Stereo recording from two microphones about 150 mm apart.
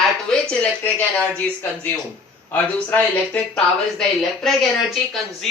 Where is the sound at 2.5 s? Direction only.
10° left (ahead or behind).